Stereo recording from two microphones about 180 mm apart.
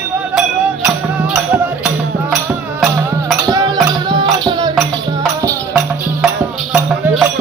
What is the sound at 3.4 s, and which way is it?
Music, 20° right (ahead or behind).